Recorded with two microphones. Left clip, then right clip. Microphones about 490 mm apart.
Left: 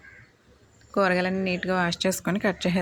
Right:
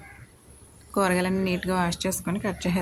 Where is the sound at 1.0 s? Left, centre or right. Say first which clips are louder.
Left 1 dB; right.